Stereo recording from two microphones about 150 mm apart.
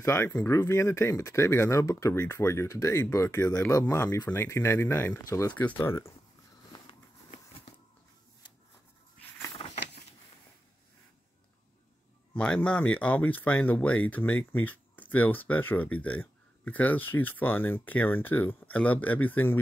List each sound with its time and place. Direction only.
0.0 s speech: 20° left (ahead or behind)
9.6 s a sound: 45° left (ahead or behind)
12.4 s speech: 5° left (ahead or behind)